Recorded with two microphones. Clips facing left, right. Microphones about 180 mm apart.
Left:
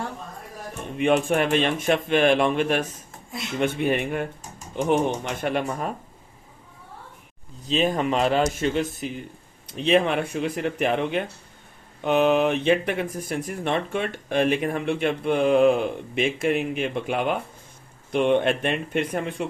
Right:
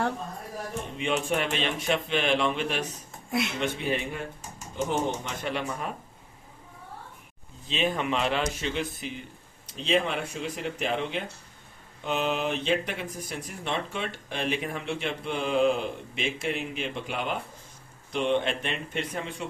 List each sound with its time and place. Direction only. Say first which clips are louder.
0.9 s speech: left 8 dB; 55° left (ahead or behind)
7.7 s speech: left 5 dB; 40° left (ahead or behind)
9.7 s speech: left 6 dB; 60° left (ahead or behind)